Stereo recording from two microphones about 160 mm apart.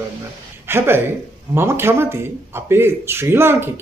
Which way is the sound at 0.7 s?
15° right (ahead or behind).